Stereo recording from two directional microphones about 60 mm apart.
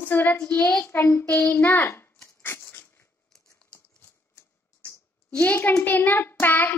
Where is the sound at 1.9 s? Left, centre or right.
Left.